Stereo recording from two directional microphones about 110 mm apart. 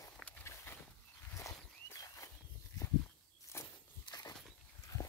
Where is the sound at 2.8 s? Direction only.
35° left (ahead or behind).